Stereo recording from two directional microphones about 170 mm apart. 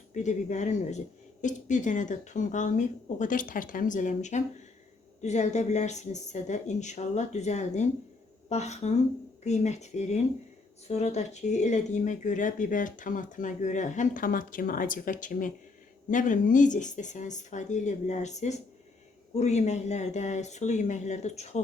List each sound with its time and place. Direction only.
0.1 s speech: 45° left (ahead or behind)